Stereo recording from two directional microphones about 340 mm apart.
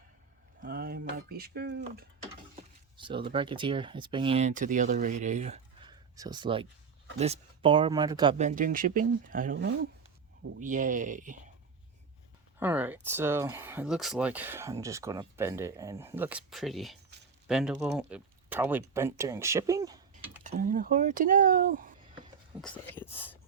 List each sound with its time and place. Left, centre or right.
0.6 s speech: right
3.0 s speech: centre
12.5 s speech: centre
20.4 s speech: right
22.6 s speech: centre